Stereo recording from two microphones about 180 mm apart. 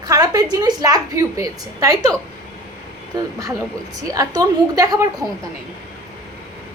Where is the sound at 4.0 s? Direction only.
20° right (ahead or behind).